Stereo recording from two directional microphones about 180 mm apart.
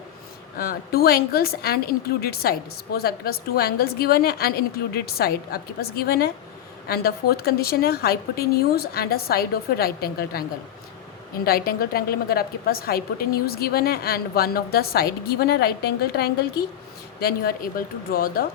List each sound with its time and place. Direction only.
0.6 s a woman's voice: 55° left (ahead or behind)
11.4 s a woman's voice: 55° left (ahead or behind)